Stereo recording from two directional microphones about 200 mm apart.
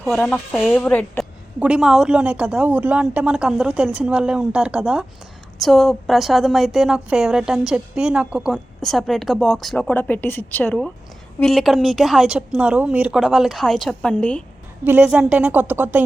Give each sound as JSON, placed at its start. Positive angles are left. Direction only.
{"t": 0.0, "sound": "a woman's voice", "side_deg": 0}
{"t": 1.5, "sound": "a woman's voice", "side_deg": -5}
{"t": 14.8, "sound": "a woman's voice", "side_deg": -5}